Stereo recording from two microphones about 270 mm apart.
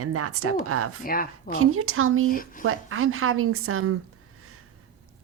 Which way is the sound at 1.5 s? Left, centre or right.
Right.